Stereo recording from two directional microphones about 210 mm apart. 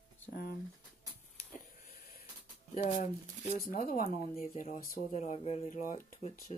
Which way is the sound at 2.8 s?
35° left (ahead or behind).